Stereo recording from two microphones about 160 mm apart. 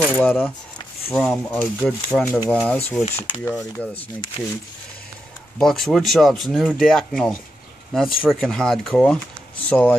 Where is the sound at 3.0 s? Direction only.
40° left (ahead or behind).